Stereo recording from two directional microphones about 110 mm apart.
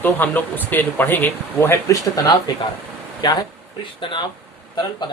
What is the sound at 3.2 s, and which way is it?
Speech, 40° left (ahead or behind).